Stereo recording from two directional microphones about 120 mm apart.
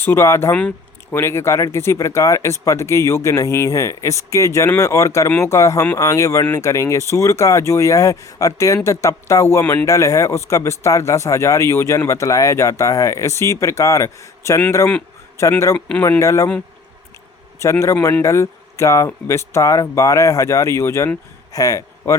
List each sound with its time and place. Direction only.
0.0 s speech: 20° left (ahead or behind)
17.6 s a man's voice: 25° left (ahead or behind)